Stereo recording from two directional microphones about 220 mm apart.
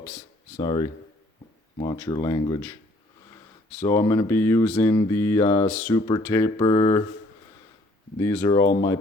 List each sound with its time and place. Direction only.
0.6 s speech: 20° left (ahead or behind)
3.8 s speech: 10° left (ahead or behind)
8.2 s speech: 10° left (ahead or behind)